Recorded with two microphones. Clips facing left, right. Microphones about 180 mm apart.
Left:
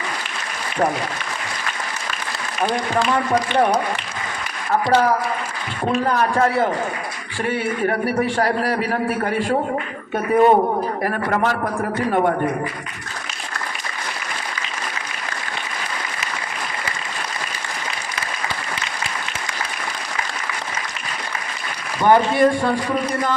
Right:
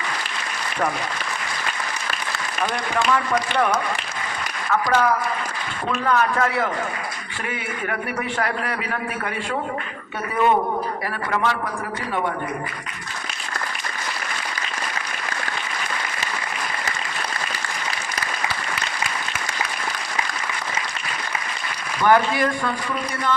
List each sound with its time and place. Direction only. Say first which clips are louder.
2.6 s a man's voice: left 2 dB; 35° left (ahead or behind)
22.0 s speech: left 4 dB; 25° left (ahead or behind)